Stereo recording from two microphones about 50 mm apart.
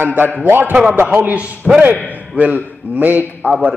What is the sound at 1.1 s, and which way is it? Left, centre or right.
A man's voice, right.